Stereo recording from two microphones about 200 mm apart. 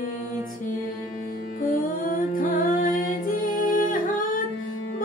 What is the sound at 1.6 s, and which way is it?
Music, 45° left (ahead or behind).